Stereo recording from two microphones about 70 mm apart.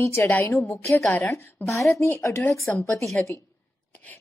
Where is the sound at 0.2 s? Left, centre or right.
Left.